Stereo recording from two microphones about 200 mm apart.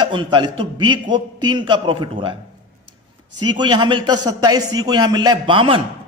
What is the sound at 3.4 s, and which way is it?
A man's voice, 20° right (ahead or behind).